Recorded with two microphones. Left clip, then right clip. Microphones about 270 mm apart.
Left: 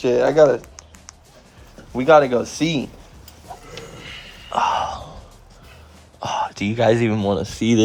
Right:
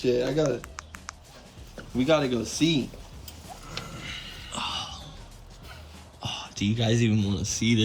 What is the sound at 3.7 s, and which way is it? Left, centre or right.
Gasp, centre.